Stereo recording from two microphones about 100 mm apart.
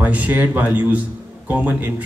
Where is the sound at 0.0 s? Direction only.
15° right (ahead or behind).